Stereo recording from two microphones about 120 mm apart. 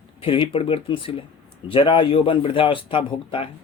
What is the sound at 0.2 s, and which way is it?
Speech, 45° left (ahead or behind).